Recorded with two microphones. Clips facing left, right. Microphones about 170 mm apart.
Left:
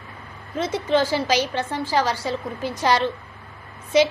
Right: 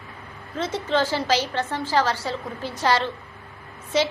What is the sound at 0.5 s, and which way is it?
A woman's voice, 15° left (ahead or behind).